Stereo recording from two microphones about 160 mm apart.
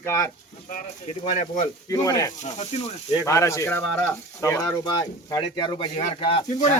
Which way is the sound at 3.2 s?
20° left (ahead or behind).